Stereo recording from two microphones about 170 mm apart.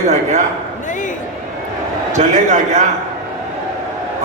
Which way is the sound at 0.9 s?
50° left (ahead or behind).